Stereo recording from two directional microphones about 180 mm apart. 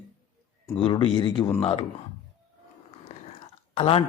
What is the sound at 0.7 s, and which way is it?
Speech, 30° left (ahead or behind).